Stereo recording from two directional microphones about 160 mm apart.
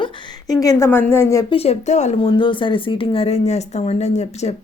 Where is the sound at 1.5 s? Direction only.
40° left (ahead or behind).